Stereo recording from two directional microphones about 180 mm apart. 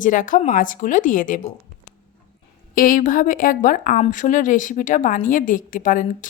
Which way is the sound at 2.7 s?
50° left (ahead or behind).